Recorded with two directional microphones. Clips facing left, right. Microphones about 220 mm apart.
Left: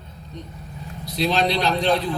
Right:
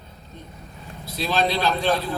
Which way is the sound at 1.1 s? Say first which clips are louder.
Left 2 dB; 15° left (ahead or behind).